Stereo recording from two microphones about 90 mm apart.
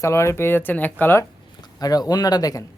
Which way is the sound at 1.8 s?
45° left (ahead or behind).